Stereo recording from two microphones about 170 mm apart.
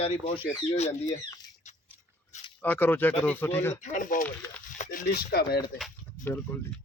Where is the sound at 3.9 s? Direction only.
50° left (ahead or behind); by 5.6 s 65° left (ahead or behind).